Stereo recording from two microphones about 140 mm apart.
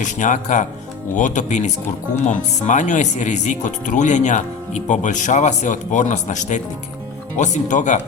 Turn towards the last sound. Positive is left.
turn(degrees=60)  # may be behind; listen again after turning